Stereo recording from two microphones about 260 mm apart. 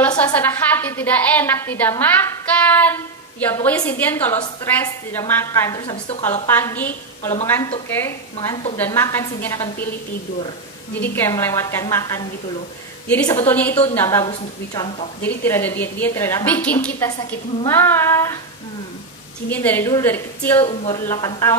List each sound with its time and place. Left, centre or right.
0.2 s a woman's voice: centre
6.5 s a woman's voice: centre
8.4 s a woman's voice: centre
8.7 s a woman's voice: centre
11.0 s a woman's voice: centre
15.2 s a woman's voice: centre
19.5 s a woman's voice: centre
20.6 s a woman's voice: left